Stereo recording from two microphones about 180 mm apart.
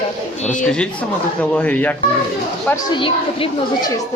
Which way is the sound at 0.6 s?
5° left (ahead or behind).